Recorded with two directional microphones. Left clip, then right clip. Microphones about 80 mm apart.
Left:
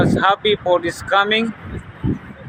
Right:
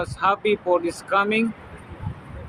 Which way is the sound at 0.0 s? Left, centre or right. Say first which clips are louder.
Left 6 dB; centre.